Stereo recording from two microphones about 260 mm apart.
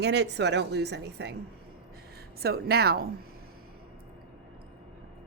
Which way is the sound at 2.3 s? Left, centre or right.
Right.